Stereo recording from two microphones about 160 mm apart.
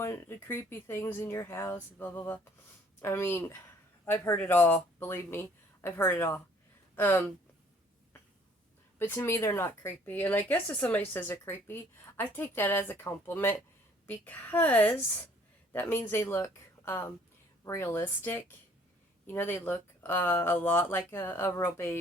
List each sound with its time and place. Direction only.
0.0 s speech: 15° left (ahead or behind)
9.0 s speech: 15° left (ahead or behind)